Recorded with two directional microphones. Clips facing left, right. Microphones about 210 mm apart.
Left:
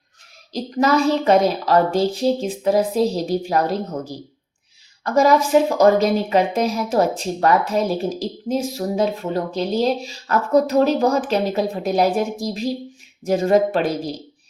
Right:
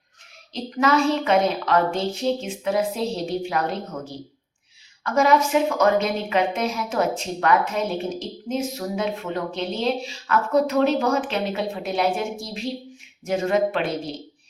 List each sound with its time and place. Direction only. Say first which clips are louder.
0.5 s a woman's voice: left 3 dB; 35° left (ahead or behind)